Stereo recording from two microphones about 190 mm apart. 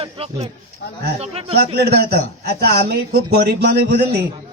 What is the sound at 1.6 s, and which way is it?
A man's voice, 60° right (ahead or behind).